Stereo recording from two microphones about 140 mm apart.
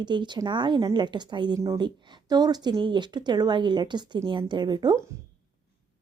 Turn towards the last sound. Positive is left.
turn(degrees=-30)  # may be behind; listen again after turning